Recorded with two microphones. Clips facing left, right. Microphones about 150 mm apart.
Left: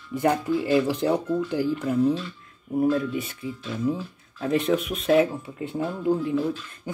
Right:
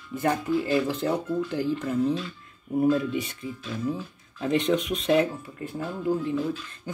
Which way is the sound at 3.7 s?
15° left (ahead or behind).